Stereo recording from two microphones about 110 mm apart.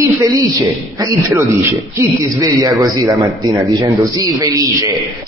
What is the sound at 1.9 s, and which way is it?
A man's voice, 35° right (ahead or behind).